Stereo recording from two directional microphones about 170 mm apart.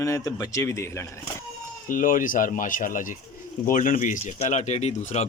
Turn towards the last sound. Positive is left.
turn(degrees=40)  # may be behind; listen again after turning